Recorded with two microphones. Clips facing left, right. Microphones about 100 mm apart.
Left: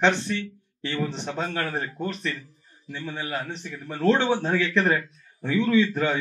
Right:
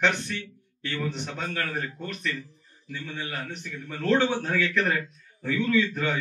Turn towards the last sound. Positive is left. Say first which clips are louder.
# left 3 dB
turn(degrees=35)  # may be behind; listen again after turning